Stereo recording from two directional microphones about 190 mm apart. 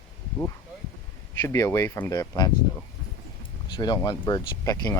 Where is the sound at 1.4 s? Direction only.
15° left (ahead or behind).